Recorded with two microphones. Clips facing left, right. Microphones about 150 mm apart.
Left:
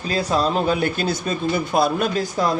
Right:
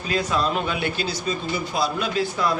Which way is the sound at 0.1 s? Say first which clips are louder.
Left 3 dB; 35° left (ahead or behind).